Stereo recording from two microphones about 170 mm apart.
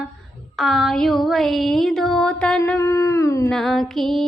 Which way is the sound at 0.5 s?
Centre (ahead or behind).